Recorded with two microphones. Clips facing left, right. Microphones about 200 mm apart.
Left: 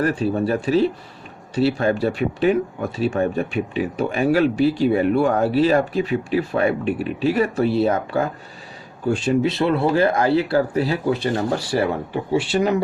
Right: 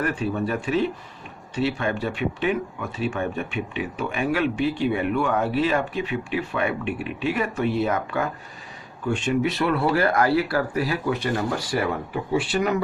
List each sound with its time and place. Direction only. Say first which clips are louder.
0.0 s speech: left 5 dB; 35° left (ahead or behind)